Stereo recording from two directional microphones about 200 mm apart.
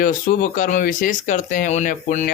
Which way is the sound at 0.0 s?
45° left (ahead or behind).